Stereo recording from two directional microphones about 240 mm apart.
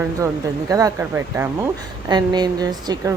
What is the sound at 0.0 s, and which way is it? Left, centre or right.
Speech, centre.